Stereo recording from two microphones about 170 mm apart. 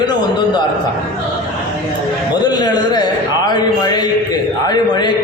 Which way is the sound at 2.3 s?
25° left (ahead or behind).